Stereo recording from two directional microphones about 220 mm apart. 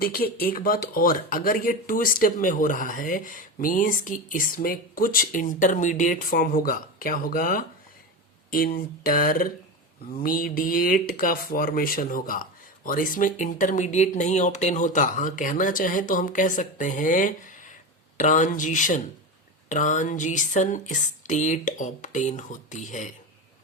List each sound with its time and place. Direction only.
0.0 s speech: 45° left (ahead or behind)